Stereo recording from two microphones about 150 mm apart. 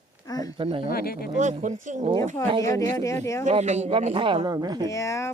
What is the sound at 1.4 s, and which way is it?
Speech, 55° right (ahead or behind).